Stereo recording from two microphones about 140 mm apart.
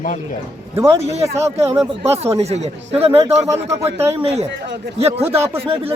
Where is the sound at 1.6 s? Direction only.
20° right (ahead or behind).